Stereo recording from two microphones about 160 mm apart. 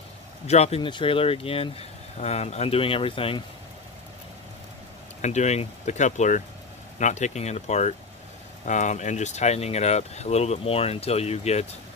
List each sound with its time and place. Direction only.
0.5 s speech: 40° left (ahead or behind)
5.2 s speech: 45° left (ahead or behind)